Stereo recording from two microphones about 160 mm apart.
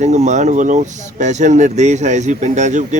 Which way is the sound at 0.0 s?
45° right (ahead or behind).